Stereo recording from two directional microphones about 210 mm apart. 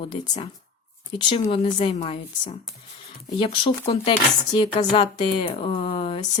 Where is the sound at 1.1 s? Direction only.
25° left (ahead or behind).